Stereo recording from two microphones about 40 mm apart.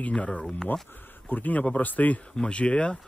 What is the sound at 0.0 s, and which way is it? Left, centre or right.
Speech, left.